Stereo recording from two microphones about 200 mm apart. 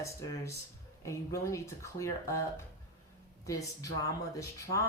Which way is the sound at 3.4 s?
15° left (ahead or behind).